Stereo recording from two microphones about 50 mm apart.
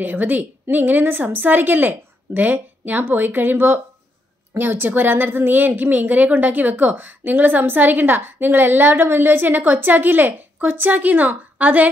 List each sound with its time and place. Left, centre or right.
0.0 s a woman's voice: right